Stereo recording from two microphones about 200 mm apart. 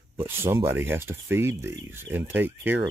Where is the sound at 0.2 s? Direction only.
10° right (ahead or behind).